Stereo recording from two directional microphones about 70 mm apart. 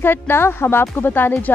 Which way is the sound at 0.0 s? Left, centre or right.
Left.